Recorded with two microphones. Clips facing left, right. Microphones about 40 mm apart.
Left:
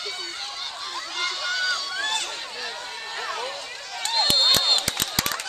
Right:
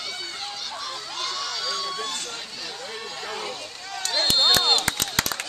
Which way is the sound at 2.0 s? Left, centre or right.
Left.